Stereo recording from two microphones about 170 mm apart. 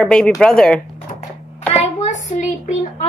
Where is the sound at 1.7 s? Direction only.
40° left (ahead or behind).